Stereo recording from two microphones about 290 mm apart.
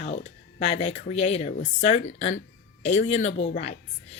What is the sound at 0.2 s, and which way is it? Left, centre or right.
A woman's voice, left.